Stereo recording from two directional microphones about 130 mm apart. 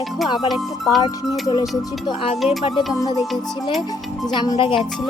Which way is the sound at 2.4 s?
Centre (ahead or behind).